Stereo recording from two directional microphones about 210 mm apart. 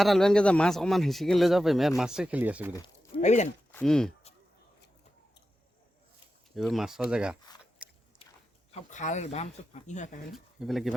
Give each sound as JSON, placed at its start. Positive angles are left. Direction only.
{"t": 0.0, "sound": "speech", "side_deg": 0}
{"t": 3.2, "sound": "speech", "side_deg": 35}
{"t": 3.7, "sound": "speech", "side_deg": 5}
{"t": 6.5, "sound": "speech", "side_deg": 0}
{"t": 7.8, "sound": "biting", "side_deg": -5}
{"t": 8.7, "sound": "speech", "side_deg": 35}
{"t": 10.3, "sound": "speech", "side_deg": 0}